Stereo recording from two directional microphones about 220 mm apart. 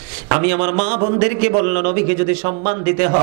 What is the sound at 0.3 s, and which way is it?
Speech, 15° right (ahead or behind).